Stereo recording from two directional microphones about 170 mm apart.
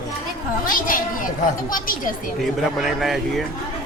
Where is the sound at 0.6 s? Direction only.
55° left (ahead or behind).